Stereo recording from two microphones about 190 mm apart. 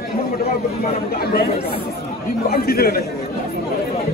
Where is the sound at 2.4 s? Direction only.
55° left (ahead or behind).